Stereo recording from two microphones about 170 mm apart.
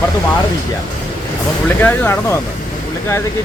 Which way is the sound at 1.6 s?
10° left (ahead or behind).